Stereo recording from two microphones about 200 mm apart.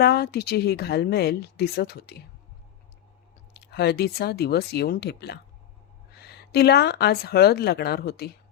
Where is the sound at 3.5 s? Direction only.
55° left (ahead or behind).